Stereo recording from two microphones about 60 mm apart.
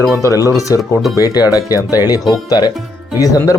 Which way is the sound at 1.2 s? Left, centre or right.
Left.